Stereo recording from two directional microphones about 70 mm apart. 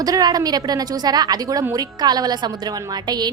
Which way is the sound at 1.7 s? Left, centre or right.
Right.